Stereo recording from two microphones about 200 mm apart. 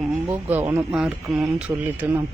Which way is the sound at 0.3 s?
10° right (ahead or behind).